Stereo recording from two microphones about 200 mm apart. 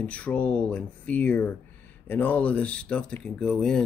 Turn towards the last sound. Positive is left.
turn(degrees=5)  # may be behind; listen again after turning